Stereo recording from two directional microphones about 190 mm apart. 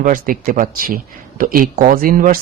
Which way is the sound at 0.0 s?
45° right (ahead or behind).